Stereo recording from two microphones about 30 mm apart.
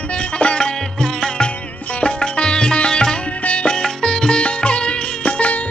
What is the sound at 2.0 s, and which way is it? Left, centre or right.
Sitar, left.